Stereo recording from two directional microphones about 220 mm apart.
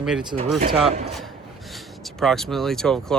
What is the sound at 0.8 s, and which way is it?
Speech, 25° right (ahead or behind).